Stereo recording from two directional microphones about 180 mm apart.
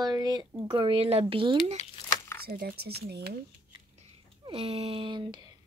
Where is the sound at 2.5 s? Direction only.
60° right (ahead or behind).